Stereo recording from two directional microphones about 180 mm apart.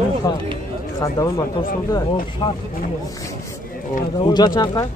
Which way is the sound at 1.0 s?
15° left (ahead or behind).